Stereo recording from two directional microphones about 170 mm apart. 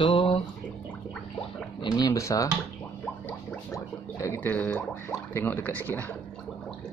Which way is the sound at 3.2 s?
15° left (ahead or behind).